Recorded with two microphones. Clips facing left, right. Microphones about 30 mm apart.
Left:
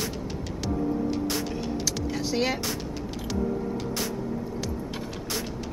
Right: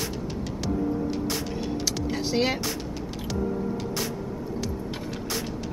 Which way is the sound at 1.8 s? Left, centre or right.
Centre.